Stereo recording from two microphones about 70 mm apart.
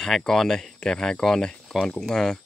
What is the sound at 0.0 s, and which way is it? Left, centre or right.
Speech, centre.